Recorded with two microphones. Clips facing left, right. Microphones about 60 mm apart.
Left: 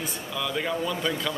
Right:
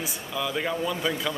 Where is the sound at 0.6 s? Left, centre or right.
Centre.